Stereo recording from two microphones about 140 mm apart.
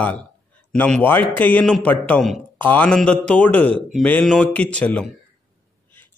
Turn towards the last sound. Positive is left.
turn(degrees=10)  # may be behind; listen again after turning